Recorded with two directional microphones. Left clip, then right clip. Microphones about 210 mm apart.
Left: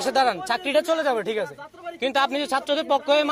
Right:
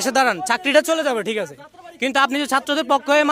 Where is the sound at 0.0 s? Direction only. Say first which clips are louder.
Right 3 dB; 50° right (ahead or behind).